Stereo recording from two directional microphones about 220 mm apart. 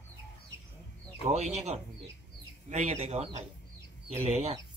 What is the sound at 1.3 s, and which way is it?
Speech, 30° right (ahead or behind).